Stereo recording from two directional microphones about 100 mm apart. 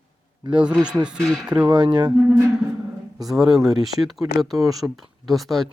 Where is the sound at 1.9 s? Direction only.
45° right (ahead or behind).